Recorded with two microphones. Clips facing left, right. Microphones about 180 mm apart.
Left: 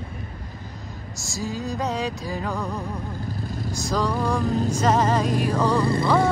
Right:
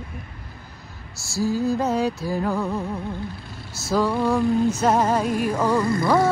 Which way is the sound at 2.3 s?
Centre (ahead or behind).